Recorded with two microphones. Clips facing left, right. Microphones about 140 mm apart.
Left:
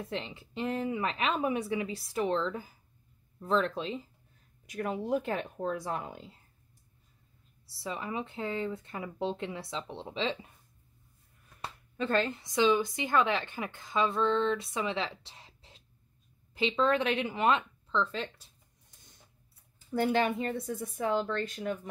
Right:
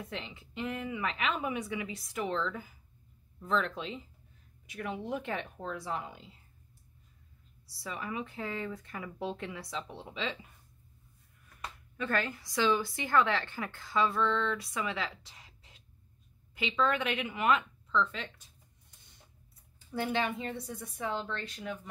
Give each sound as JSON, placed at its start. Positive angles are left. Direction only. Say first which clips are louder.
{"t": 0.0, "sound": "a woman's voice", "louder": "left 4 dB", "side_deg": 30}
{"t": 7.6, "sound": "speech", "louder": "left 3 dB", "side_deg": 25}
{"t": 11.6, "sound": "a woman's voice", "louder": "left 3 dB", "side_deg": 25}
{"t": 19.9, "sound": "a woman's voice", "louder": "left 5 dB", "side_deg": 45}